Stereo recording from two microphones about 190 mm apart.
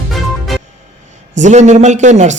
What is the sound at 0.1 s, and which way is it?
Music, centre (ahead or behind).